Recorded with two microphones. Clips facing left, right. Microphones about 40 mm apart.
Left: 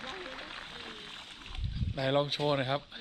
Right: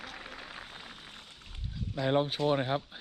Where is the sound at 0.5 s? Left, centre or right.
Left.